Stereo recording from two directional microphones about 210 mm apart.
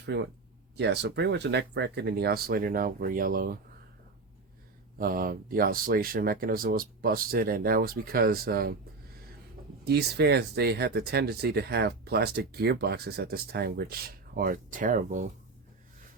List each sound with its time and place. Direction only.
0.0 s speech: 55° right (ahead or behind)
4.9 s speech: 45° right (ahead or behind)
9.8 s speech: 50° right (ahead or behind)